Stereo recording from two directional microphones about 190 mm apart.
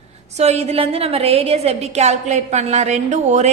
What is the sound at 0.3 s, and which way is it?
A woman's voice, 35° right (ahead or behind).